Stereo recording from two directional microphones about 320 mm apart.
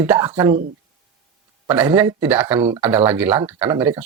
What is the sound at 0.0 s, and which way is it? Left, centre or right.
Speech, centre.